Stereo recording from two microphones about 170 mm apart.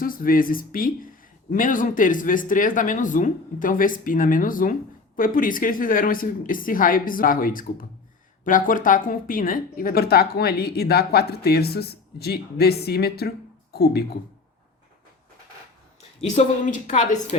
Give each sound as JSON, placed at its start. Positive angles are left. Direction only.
{"t": 0.0, "sound": "a woman's voice", "side_deg": 55}
{"t": 16.3, "sound": "speech", "side_deg": 45}